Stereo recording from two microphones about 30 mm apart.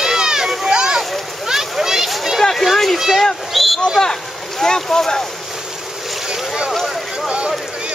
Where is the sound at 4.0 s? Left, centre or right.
Centre.